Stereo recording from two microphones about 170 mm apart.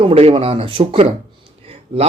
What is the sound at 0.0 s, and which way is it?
Speech, 35° right (ahead or behind).